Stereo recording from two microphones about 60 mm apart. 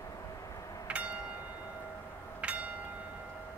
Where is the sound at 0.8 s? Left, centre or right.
Right.